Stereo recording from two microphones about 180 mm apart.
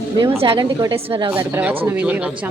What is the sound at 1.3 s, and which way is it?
A man's voice, 10° right (ahead or behind).